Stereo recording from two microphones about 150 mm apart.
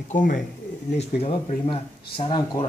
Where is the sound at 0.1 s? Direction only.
65° left (ahead or behind).